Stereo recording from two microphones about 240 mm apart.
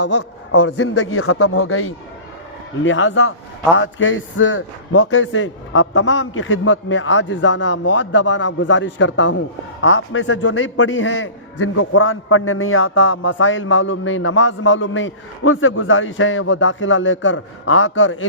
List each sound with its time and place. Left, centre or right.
0.0 s a man's voice: left